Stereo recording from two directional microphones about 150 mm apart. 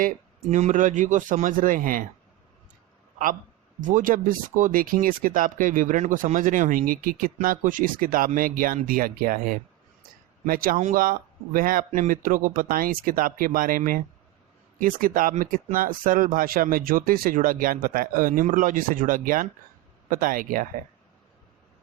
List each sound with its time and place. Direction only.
0.0 s a man's voice: 60° right (ahead or behind)
3.8 s speech: 60° right (ahead or behind)